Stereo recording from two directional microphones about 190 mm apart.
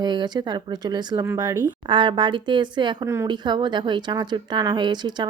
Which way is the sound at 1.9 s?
25° right (ahead or behind).